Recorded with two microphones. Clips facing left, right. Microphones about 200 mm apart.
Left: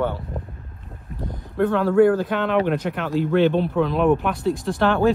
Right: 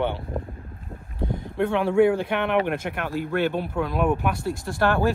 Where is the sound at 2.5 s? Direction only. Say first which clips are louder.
Left 3 dB; 10° right (ahead or behind).